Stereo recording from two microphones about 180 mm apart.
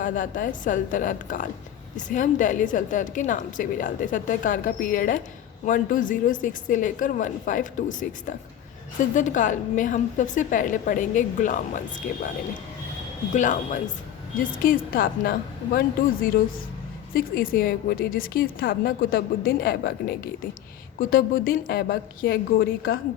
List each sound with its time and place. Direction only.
0.0 s a woman's voice: 45° left (ahead or behind)
13.3 s a woman's voice: 45° left (ahead or behind)
17.2 s a woman's voice: 55° left (ahead or behind)